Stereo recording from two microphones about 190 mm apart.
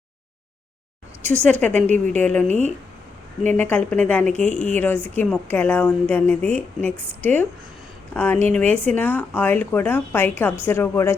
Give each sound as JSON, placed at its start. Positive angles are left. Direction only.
{"t": 1.5, "sound": "speech", "side_deg": 5}
{"t": 2.5, "sound": "speech", "side_deg": -35}
{"t": 3.4, "sound": "speech", "side_deg": 10}